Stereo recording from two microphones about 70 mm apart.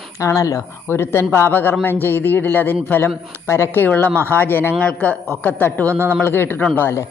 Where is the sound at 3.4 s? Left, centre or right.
Left.